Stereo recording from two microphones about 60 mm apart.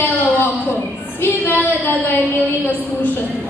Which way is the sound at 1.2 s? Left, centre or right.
Left.